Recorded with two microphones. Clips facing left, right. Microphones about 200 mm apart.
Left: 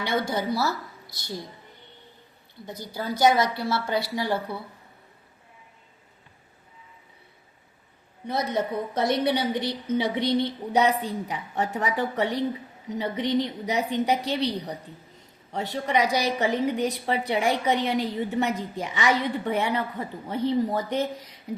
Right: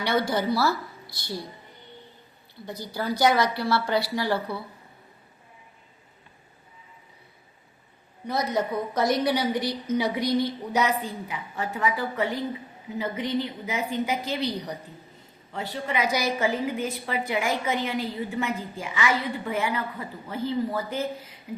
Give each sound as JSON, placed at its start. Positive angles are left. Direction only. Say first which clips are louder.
{"t": 0.2, "sound": "a woman's voice", "louder": "right 3 dB", "side_deg": 20}
{"t": 2.6, "sound": "a woman's voice", "louder": "right 2 dB", "side_deg": 20}
{"t": 8.3, "sound": "a woman's voice", "louder": "even", "side_deg": 25}
{"t": 15.5, "sound": "a woman's voice", "louder": "left 4 dB", "side_deg": 40}